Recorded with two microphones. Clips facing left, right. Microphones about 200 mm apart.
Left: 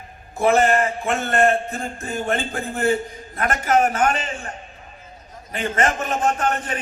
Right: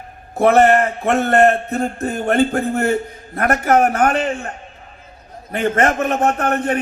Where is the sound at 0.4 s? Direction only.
60° right (ahead or behind).